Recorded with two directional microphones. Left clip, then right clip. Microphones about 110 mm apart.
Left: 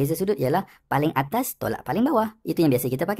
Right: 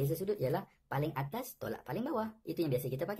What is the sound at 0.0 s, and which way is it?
Speech, 45° left (ahead or behind).